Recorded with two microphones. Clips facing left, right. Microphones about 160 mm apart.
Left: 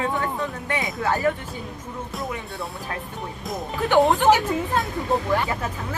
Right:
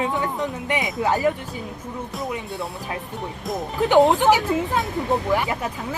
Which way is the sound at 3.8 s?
15° right (ahead or behind).